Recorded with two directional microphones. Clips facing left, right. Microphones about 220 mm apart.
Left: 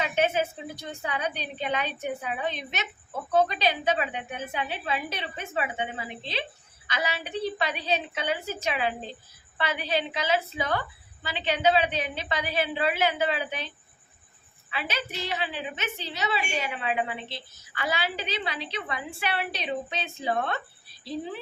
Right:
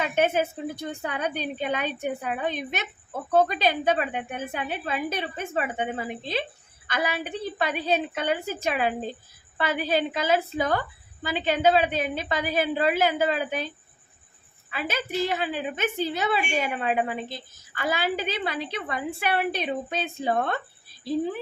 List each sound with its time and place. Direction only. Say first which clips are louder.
0.0 s a woman's voice: right 2 dB; 50° right (ahead or behind)